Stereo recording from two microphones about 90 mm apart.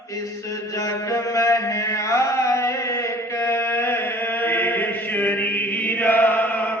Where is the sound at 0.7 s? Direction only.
40° left (ahead or behind).